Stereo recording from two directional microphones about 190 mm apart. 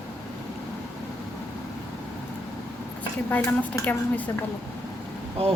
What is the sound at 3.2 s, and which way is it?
Speech, 10° left (ahead or behind).